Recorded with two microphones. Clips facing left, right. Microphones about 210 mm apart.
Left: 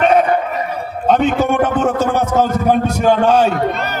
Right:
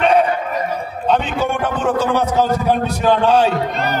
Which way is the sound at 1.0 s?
45° left (ahead or behind).